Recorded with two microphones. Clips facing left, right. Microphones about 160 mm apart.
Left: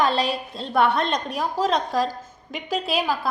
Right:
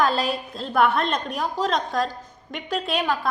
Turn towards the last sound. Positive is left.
turn(degrees=5)  # may be behind; listen again after turning